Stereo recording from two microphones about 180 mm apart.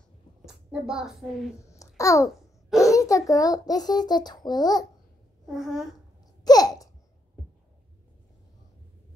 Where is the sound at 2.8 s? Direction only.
20° left (ahead or behind).